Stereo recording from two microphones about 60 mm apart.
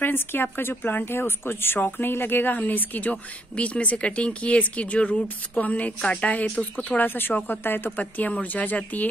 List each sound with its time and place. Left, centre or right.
0.0 s speech: left
7.9 s speech: left